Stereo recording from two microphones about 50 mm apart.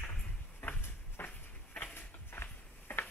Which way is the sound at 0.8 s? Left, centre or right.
Left.